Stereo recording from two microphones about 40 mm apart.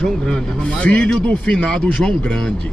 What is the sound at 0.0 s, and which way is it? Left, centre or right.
Speech, left.